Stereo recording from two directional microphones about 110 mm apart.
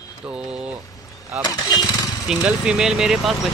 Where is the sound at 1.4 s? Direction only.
40° left (ahead or behind).